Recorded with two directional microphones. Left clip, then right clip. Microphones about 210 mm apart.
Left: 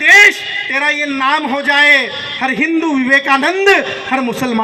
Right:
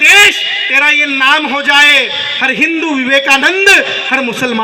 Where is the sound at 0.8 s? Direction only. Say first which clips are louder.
Right 5 dB; 45° left (ahead or behind).